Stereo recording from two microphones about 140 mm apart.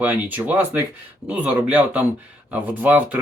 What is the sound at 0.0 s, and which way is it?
Speech, 15° right (ahead or behind).